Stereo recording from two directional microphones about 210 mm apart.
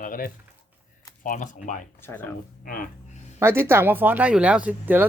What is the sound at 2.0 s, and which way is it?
Speech, 10° left (ahead or behind).